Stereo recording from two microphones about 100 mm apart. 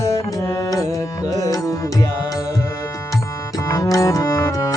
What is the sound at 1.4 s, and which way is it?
Music, 35° left (ahead or behind).